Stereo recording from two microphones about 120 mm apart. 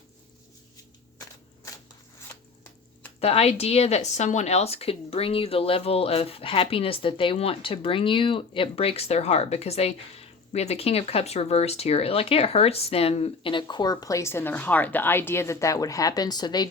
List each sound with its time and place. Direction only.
3.2 s speech: 60° left (ahead or behind); by 16.6 s 35° left (ahead or behind)